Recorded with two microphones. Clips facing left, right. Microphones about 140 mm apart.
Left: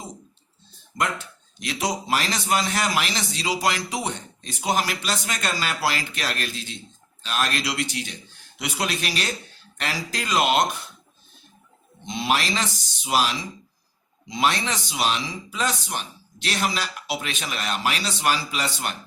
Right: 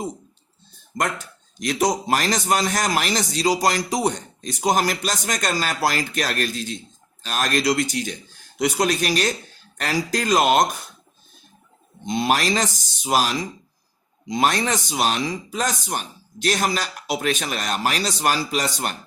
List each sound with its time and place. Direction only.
1.5 s a man's voice: 45° right (ahead or behind)
12.0 s a man's voice: 45° right (ahead or behind)